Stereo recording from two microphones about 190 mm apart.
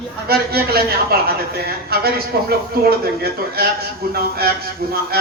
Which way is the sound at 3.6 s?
55° right (ahead or behind).